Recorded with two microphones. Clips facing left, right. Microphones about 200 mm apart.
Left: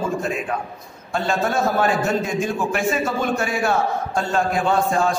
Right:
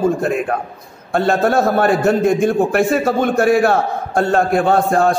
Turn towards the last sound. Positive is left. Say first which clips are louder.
# right 5 dB
turn(degrees=-60)  # may be behind; listen again after turning